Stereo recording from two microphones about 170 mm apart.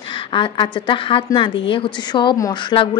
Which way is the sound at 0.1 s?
30° left (ahead or behind).